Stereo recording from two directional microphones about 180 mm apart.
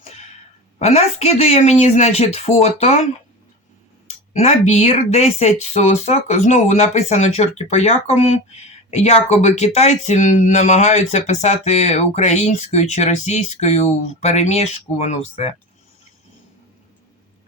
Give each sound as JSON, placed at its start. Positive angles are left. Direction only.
{"t": 0.8, "sound": "speech", "side_deg": 35}
{"t": 4.4, "sound": "speech", "side_deg": 35}